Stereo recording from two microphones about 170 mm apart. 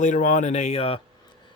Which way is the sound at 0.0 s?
45° left (ahead or behind).